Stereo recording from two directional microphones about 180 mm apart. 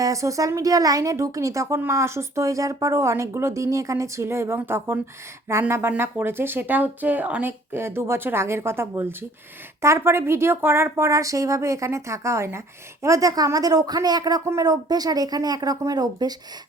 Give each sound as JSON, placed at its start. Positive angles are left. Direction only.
{"t": 0.0, "sound": "a woman's voice", "side_deg": -15}